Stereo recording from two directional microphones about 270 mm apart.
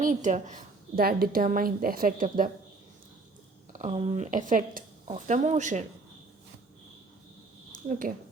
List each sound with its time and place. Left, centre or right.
0.0 s a woman's voice: right
3.7 s speech: right
7.9 s a woman's voice: right